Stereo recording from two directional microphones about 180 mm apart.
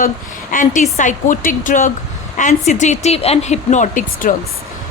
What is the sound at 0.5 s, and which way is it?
A woman's voice, 45° left (ahead or behind).